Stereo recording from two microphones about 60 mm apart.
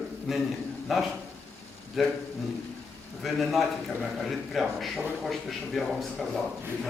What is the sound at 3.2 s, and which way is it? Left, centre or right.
A man's voice, centre.